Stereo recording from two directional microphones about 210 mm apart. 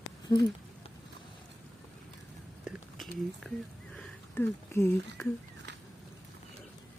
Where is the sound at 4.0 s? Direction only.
10° left (ahead or behind).